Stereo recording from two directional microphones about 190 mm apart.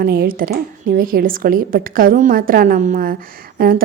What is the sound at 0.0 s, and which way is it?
A woman's voice, 50° right (ahead or behind).